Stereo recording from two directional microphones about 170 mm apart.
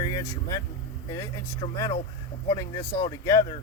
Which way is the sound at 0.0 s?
20° left (ahead or behind).